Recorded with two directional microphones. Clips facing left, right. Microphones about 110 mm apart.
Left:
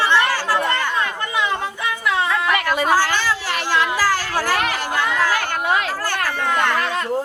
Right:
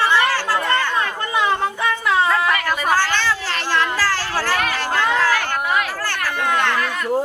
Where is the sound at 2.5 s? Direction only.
20° left (ahead or behind).